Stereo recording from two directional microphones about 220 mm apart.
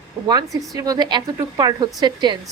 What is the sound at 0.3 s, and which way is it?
A woman's voice, 15° right (ahead or behind).